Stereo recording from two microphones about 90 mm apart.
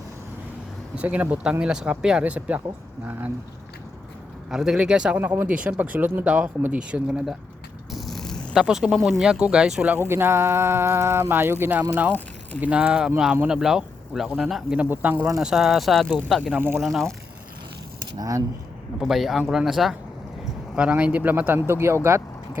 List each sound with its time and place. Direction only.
0.9 s speech: 15° right (ahead or behind)
4.4 s speech: 5° right (ahead or behind)
5.1 s speech: 20° right (ahead or behind)
7.9 s purr: 5° left (ahead or behind)
8.5 s speech: 5° right (ahead or behind)
9.9 s speech: 25° right (ahead or behind); by 14.8 s 5° right (ahead or behind)
14.8 s speech: 20° right (ahead or behind)
15.4 s speech: 5° right (ahead or behind)
16.5 s speech: 25° right (ahead or behind)
16.8 s speech: 5° left (ahead or behind)
18.2 s speech: 40° right (ahead or behind)
18.9 s speech: 5° right (ahead or behind)
20.7 s speech: 15° right (ahead or behind)